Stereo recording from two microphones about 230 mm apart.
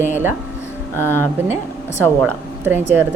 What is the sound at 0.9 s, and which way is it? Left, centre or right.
Speech, centre.